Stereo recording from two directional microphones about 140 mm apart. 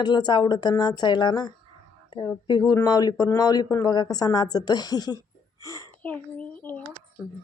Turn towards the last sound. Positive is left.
turn(degrees=10)  # may be behind; listen again after turning